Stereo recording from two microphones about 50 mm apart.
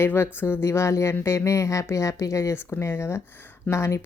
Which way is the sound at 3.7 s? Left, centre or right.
Left.